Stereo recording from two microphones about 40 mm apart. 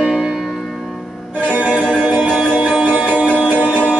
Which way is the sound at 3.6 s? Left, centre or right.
Left.